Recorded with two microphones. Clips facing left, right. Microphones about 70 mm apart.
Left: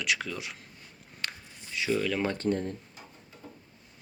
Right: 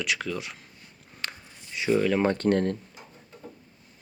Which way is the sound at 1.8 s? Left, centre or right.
Right.